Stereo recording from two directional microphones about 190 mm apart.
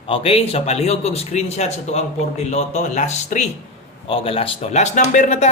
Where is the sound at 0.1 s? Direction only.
30° left (ahead or behind).